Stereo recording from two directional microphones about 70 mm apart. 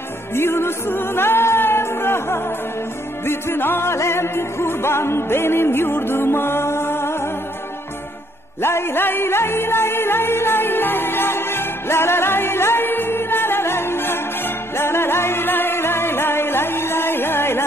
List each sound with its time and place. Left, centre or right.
0.3 s music: left
8.5 s music: left